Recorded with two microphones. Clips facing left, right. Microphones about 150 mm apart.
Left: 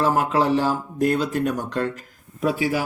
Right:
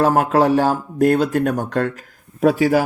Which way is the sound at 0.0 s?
50° right (ahead or behind).